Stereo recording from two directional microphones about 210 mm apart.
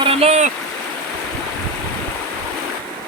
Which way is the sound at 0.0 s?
30° right (ahead or behind).